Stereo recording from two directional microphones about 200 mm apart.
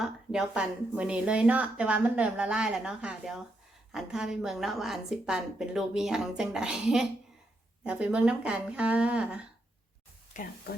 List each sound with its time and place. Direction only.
0.0 s speech: 5° right (ahead or behind)
10.3 s speech: 40° left (ahead or behind)